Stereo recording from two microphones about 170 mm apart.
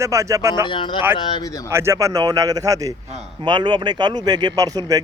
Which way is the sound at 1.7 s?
15° right (ahead or behind).